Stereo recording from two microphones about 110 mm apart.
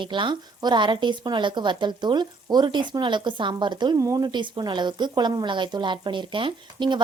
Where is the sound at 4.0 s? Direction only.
30° right (ahead or behind); by 6.9 s 45° right (ahead or behind).